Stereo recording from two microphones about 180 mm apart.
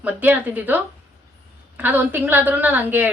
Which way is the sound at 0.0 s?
10° right (ahead or behind).